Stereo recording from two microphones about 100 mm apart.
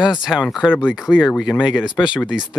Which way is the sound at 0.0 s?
5° right (ahead or behind).